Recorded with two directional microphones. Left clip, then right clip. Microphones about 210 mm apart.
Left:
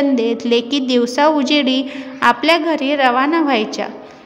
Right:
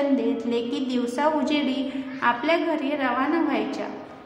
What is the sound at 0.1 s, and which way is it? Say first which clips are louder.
A woman's voice: left 9 dB; 45° left (ahead or behind).